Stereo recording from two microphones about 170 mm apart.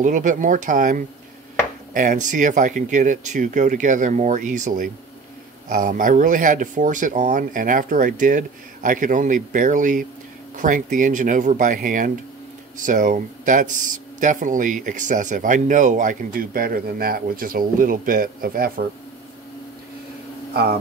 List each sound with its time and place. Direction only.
0.0 s speech: 50° right (ahead or behind)